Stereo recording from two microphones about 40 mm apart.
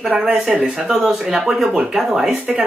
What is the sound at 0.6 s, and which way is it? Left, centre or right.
Speech, centre.